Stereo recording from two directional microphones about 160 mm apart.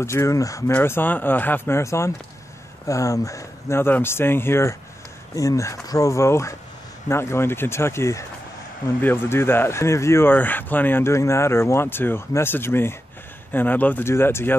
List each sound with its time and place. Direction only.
0.0 s speech: 15° left (ahead or behind)